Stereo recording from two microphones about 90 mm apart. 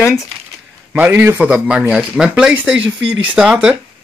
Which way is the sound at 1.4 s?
15° right (ahead or behind).